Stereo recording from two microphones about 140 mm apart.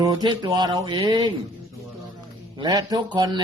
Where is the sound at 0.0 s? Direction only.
30° right (ahead or behind).